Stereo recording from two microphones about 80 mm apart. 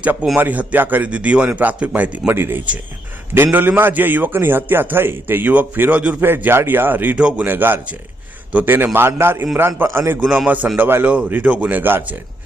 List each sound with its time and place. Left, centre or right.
0.0 s a man's voice: centre
2.3 s a man's voice: right
10.2 s a man's voice: centre